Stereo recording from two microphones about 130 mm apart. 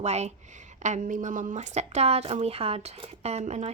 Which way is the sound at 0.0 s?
60° right (ahead or behind).